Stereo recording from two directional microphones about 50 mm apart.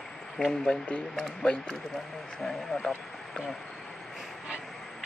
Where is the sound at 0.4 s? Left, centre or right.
Centre.